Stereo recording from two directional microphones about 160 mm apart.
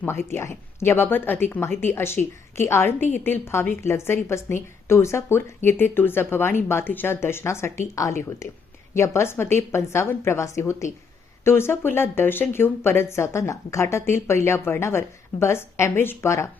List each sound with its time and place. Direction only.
0.0 s speech: 15° left (ahead or behind)